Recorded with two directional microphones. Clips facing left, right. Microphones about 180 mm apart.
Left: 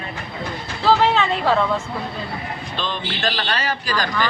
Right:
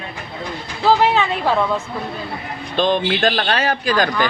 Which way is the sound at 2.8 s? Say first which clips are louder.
Right 11 dB; 50° right (ahead or behind).